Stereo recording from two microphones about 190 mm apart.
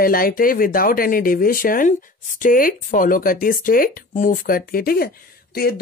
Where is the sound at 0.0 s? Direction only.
50° left (ahead or behind).